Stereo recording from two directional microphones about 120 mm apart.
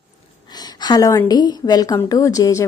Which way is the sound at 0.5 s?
35° left (ahead or behind).